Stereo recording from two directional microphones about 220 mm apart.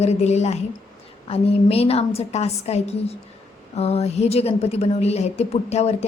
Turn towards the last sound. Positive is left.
turn(degrees=30)  # may be behind; listen again after turning